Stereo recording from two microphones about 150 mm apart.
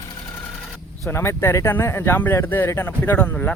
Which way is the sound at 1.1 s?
15° left (ahead or behind).